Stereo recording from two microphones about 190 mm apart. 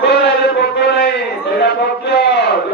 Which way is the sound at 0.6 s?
60° left (ahead or behind).